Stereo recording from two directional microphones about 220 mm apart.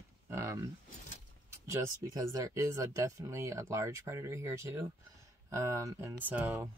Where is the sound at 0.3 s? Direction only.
15° right (ahead or behind).